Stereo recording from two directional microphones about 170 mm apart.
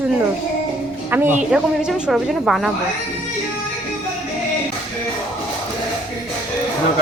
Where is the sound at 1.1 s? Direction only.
10° right (ahead or behind).